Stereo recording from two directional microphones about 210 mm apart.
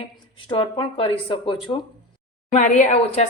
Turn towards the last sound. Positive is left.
turn(degrees=30)  # may be behind; listen again after turning